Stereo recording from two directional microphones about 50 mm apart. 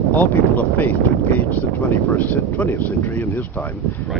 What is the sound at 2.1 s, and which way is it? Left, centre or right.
Speech, left.